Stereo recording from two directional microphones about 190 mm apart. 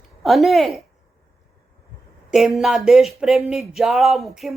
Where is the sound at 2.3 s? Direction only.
Centre (ahead or behind).